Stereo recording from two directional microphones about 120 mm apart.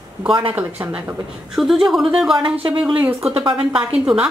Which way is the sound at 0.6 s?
15° right (ahead or behind).